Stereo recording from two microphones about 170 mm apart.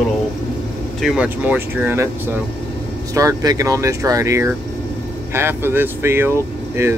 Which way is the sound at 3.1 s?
20° right (ahead or behind).